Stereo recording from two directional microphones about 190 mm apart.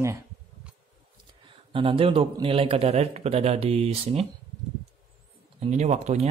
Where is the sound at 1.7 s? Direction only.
30° right (ahead or behind).